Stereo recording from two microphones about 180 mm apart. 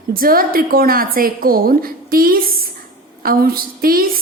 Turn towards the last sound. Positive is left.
turn(degrees=-55)  # may be behind; listen again after turning